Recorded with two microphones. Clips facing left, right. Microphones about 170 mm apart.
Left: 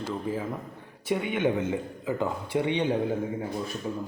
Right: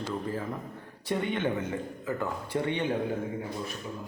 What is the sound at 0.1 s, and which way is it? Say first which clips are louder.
Speech: left 3 dB; 10° left (ahead or behind).